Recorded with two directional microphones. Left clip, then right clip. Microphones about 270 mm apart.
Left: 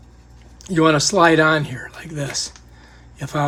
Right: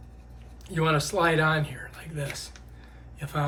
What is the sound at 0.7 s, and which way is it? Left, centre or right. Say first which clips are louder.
Speech: left 10 dB; left.